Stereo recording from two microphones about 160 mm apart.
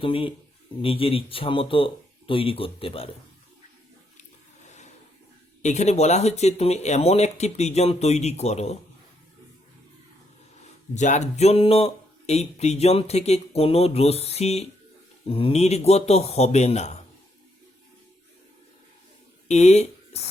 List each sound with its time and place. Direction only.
0.0 s speech: 35° left (ahead or behind)
4.6 s a sound: 45° left (ahead or behind)
5.6 s speech: 45° left (ahead or behind)
10.9 s speech: 50° left (ahead or behind)
19.5 s speech: 45° left (ahead or behind)